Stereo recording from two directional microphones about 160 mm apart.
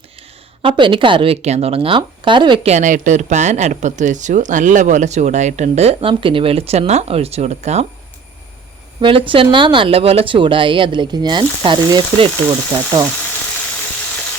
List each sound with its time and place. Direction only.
0.6 s speech: 30° right (ahead or behind)
2.7 s speech: 50° right (ahead or behind)
9.0 s speech: 35° right (ahead or behind)